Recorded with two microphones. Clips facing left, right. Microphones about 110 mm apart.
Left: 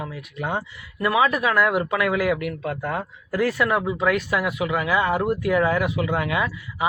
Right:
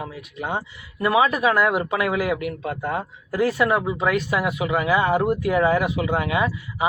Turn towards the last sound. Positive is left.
turn(degrees=-20)  # may be behind; listen again after turning